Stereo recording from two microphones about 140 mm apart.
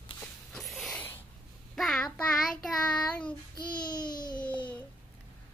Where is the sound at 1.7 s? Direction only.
Centre (ahead or behind).